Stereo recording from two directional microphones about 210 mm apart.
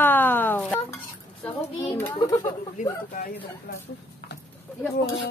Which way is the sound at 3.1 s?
45° left (ahead or behind).